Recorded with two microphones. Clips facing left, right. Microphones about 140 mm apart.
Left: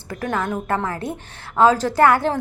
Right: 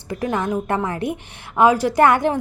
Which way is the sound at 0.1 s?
20° right (ahead or behind).